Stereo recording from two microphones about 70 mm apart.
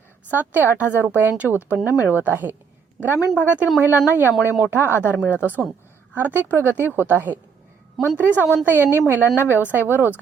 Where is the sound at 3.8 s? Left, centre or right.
Right.